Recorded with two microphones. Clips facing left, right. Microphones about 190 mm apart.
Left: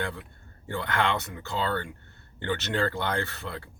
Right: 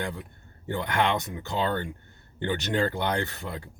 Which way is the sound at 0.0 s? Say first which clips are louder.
Even; 15° right (ahead or behind).